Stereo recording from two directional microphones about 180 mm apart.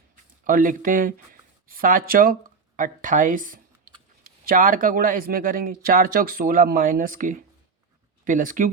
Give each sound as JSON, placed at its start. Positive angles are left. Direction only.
{"t": 0.4, "sound": "speech", "side_deg": -50}